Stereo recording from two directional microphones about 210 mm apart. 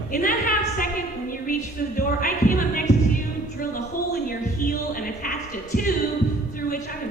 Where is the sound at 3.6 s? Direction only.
45° left (ahead or behind).